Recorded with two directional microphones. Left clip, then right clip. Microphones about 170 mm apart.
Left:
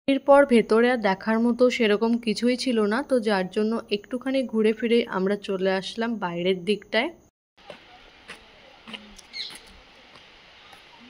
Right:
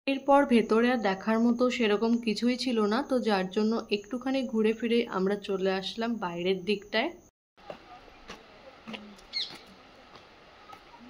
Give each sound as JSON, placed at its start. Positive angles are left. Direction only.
{"t": 0.1, "sound": "speech", "side_deg": 35}